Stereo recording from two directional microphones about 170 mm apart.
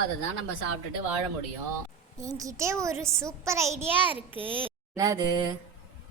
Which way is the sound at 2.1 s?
20° right (ahead or behind).